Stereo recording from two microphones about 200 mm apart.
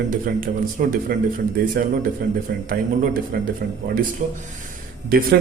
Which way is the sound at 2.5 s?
45° right (ahead or behind).